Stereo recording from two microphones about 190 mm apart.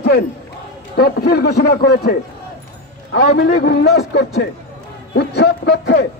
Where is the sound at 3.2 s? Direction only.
60° left (ahead or behind).